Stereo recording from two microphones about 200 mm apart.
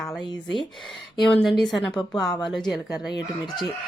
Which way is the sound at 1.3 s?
Centre (ahead or behind).